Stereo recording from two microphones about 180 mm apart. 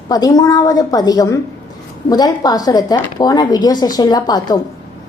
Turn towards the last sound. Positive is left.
turn(degrees=20)  # may be behind; listen again after turning